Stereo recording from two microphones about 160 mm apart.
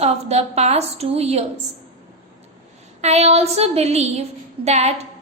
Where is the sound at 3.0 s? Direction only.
40° right (ahead or behind).